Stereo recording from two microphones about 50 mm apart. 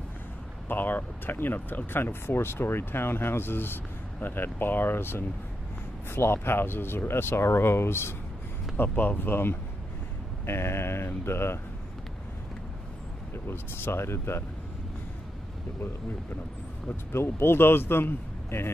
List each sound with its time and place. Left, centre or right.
0.7 s speech: left
8.7 s speech: left
13.5 s speech: left
17.1 s speech: left